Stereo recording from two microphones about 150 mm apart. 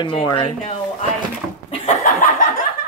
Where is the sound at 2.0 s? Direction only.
60° left (ahead or behind).